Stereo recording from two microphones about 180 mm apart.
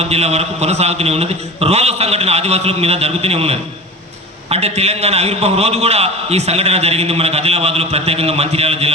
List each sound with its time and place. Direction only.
0.0 s a man's voice: 35° right (ahead or behind)